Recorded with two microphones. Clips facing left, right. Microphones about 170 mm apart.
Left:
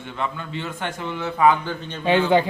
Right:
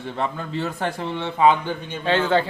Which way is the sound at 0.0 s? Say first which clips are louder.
Right 2 dB; 35° right (ahead or behind).